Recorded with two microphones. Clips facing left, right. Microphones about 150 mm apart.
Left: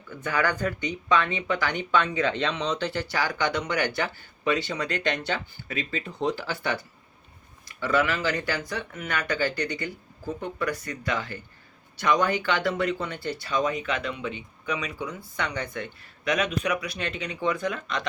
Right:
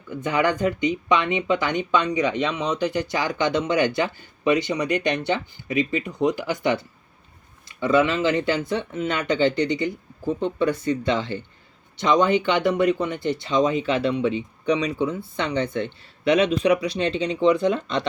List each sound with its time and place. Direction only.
0.1 s speech: 20° right (ahead or behind)